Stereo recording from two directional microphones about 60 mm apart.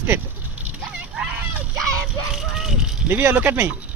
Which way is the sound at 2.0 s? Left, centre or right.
Centre.